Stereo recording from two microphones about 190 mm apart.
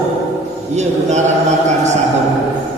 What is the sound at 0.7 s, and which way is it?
Mantra, 35° right (ahead or behind).